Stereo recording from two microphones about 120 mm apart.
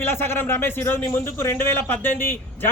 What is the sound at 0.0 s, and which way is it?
A man's voice, 20° left (ahead or behind).